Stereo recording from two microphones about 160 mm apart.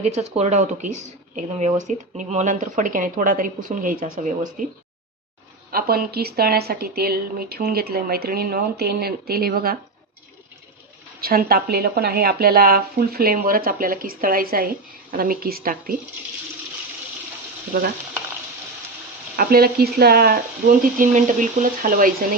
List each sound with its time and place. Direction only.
0.0 s speech: 40° right (ahead or behind); by 4.7 s 55° right (ahead or behind)
5.7 s a woman's voice: 70° right (ahead or behind)
11.2 s a woman's voice: 70° right (ahead or behind)
17.7 s speech: 55° right (ahead or behind)
19.4 s speech: 70° right (ahead or behind)